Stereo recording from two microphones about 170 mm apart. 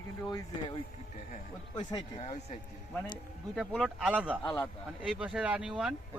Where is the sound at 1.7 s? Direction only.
25° left (ahead or behind).